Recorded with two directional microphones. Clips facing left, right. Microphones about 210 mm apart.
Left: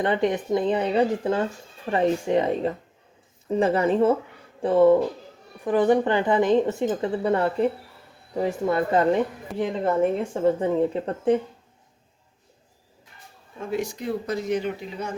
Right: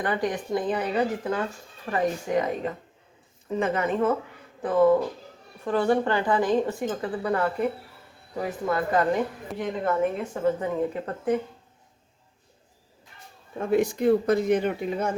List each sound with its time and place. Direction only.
0.0 s a woman's voice: 25° left (ahead or behind)
5.6 s a woman's voice: 15° left (ahead or behind)
13.7 s speech: 55° right (ahead or behind)